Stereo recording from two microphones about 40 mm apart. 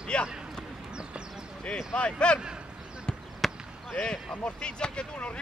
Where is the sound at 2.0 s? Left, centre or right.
Left.